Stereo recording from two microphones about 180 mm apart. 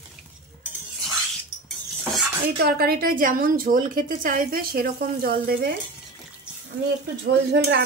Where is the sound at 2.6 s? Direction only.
60° right (ahead or behind).